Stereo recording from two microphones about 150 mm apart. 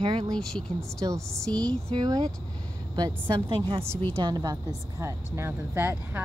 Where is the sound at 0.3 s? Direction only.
5° left (ahead or behind).